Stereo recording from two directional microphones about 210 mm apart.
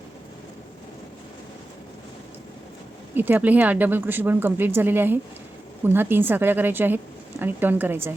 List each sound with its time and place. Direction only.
3.2 s a woman's voice: 10° right (ahead or behind)